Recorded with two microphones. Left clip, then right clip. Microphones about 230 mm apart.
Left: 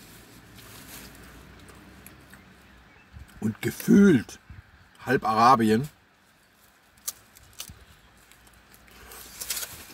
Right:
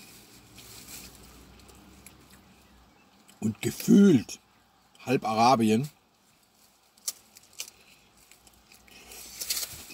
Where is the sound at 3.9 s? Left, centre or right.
Centre.